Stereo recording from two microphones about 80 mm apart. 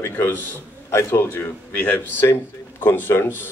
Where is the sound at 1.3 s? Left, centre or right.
Left.